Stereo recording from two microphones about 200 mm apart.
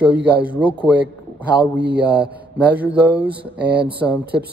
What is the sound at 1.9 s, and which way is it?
Speech, 5° right (ahead or behind).